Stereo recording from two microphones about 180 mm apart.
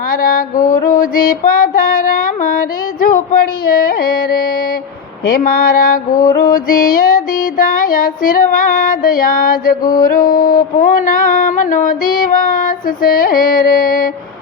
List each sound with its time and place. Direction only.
0.1 s mantra: 50° left (ahead or behind)
3.7 s yodeling: 55° left (ahead or behind)
5.4 s mantra: 50° left (ahead or behind)